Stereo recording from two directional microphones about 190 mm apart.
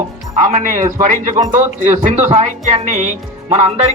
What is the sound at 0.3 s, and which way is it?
Speech, 40° right (ahead or behind).